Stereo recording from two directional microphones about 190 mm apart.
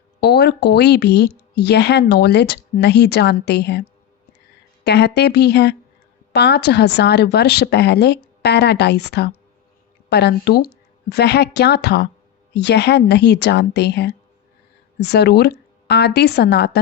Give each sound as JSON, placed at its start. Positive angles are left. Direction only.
{"t": 0.2, "sound": "a woman's voice", "side_deg": 60}